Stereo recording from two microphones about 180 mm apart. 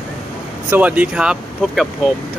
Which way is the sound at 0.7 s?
10° right (ahead or behind).